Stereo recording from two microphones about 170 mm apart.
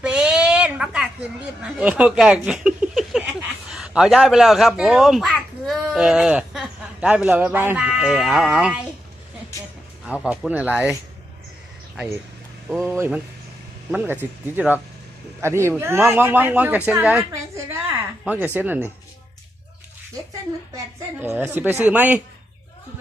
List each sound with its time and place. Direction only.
0.0 s a sound: 5° right (ahead or behind)
3.7 s speech: 5° right (ahead or behind)
10.1 s a woman's voice: 5° right (ahead or behind)
12.6 s a woman's voice: 10° right (ahead or behind)
20.7 s a woman's voice: 10° right (ahead or behind)